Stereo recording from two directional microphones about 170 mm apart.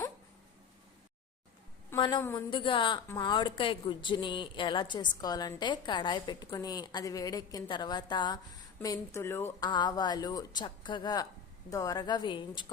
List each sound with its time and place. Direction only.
2.0 s speech: 25° left (ahead or behind)
9.6 s speech: 25° left (ahead or behind)